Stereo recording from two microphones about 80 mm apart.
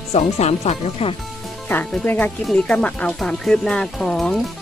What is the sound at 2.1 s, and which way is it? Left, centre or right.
Speech, left.